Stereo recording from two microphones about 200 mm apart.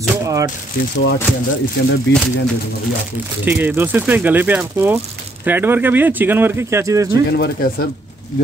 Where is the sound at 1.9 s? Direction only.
70° left (ahead or behind).